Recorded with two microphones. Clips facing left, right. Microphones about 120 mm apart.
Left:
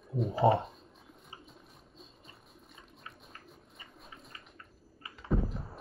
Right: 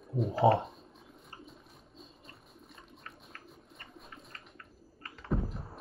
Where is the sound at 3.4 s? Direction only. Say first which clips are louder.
Right 1 dB; centre (ahead or behind).